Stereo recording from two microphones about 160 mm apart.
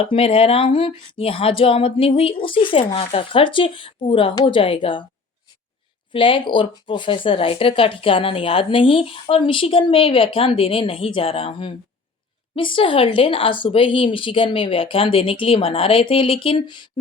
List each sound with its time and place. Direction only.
0.0 s speech: 35° left (ahead or behind)
6.1 s speech: 30° left (ahead or behind)